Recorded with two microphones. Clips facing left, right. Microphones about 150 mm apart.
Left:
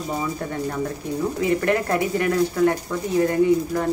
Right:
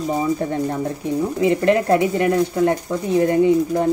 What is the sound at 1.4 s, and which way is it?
Speech, 20° right (ahead or behind).